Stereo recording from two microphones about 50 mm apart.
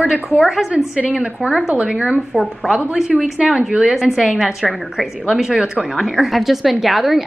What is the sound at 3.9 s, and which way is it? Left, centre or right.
A woman's voice, centre.